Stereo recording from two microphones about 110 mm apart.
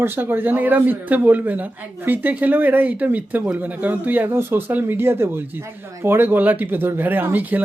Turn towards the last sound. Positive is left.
turn(degrees=-15)  # may be behind; listen again after turning